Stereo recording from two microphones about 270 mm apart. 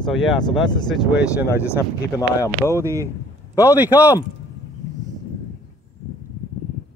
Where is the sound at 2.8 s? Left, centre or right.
Centre.